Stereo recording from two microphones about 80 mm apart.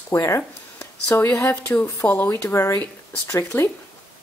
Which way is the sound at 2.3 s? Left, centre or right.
Left.